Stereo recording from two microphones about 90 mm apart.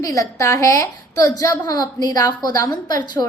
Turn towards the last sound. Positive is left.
turn(degrees=45)  # may be behind; listen again after turning